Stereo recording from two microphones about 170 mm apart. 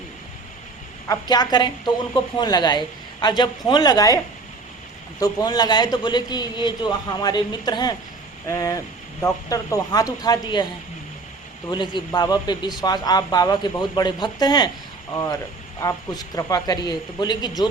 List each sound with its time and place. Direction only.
1.0 s a man's voice: 20° left (ahead or behind)
5.2 s a man's voice: 25° left (ahead or behind)
11.7 s a man's voice: 25° left (ahead or behind)